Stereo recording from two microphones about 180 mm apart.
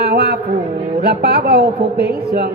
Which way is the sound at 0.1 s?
65° right (ahead or behind).